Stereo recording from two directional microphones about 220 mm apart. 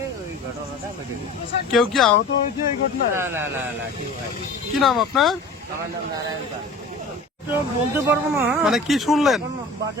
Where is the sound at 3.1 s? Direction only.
10° right (ahead or behind).